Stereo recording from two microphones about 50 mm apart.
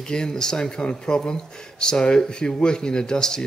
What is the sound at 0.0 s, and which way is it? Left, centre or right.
Speech, centre.